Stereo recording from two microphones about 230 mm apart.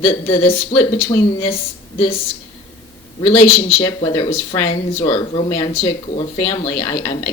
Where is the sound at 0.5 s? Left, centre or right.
Left.